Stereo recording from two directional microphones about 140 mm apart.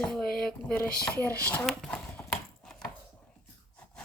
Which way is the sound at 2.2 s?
5° left (ahead or behind).